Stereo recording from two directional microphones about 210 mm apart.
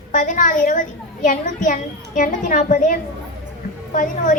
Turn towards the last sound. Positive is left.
turn(degrees=40)  # may be behind; listen again after turning